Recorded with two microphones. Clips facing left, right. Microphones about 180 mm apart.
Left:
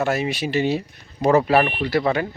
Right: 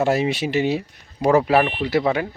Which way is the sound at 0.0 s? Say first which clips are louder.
Right 3 dB; 30° right (ahead or behind).